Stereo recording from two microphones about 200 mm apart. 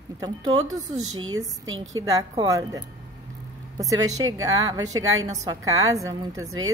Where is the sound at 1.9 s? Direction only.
15° right (ahead or behind).